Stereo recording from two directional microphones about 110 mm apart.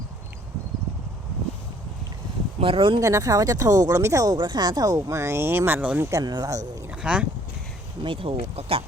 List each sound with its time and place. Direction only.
2.6 s speech: 50° right (ahead or behind)
3.0 s speech: 30° right (ahead or behind)
6.1 s speech: 35° right (ahead or behind)
6.9 s speech: 10° right (ahead or behind)
8.0 s speech: 55° right (ahead or behind)